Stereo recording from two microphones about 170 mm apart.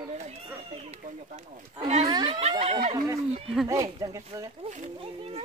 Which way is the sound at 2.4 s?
40° right (ahead or behind).